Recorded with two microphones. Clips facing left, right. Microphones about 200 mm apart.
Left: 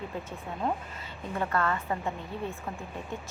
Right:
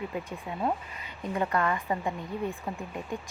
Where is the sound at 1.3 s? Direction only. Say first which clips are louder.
Right 1 dB; 15° right (ahead or behind).